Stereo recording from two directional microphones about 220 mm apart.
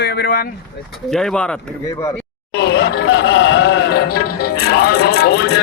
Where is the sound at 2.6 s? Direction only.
50° left (ahead or behind).